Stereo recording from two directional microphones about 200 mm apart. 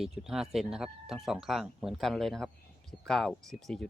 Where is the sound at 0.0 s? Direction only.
Centre (ahead or behind).